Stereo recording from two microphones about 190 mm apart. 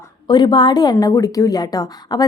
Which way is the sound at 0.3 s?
25° left (ahead or behind).